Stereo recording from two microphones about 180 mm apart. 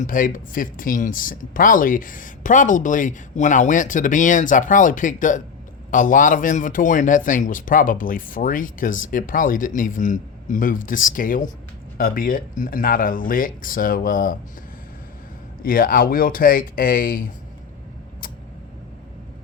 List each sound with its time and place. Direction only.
0.0 s speech: 50° left (ahead or behind)
15.6 s speech: 55° left (ahead or behind)